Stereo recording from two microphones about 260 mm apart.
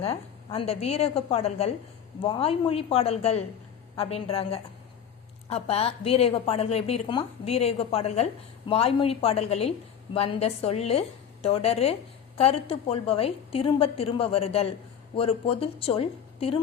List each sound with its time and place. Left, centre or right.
0.0 s a woman's voice: left